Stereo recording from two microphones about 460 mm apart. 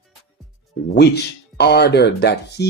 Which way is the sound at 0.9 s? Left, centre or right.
Left.